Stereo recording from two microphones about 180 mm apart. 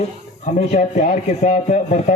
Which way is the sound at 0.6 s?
40° left (ahead or behind).